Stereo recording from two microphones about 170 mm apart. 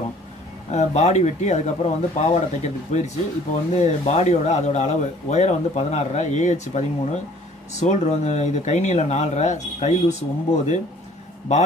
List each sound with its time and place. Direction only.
0.7 s speech: 40° left (ahead or behind)